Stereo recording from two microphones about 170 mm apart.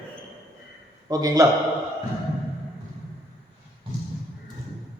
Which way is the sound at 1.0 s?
20° right (ahead or behind).